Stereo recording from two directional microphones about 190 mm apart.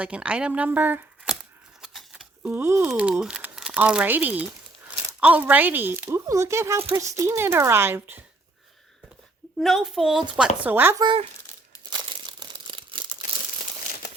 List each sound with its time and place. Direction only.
0.0 s speech: 5° right (ahead or behind)
1.8 s keys jangling: centre (ahead or behind)
2.5 s speech: 10° right (ahead or behind)
9.6 s a woman's voice: centre (ahead or behind)
11.0 s speech: 25° right (ahead or behind)
11.9 s crumpling: 25° right (ahead or behind)